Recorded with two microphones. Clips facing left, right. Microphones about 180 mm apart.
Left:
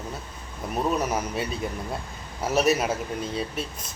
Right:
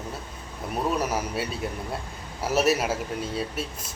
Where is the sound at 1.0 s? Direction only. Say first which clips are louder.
Even; 10° right (ahead or behind).